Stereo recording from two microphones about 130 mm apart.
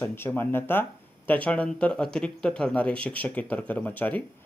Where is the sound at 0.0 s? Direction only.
15° left (ahead or behind).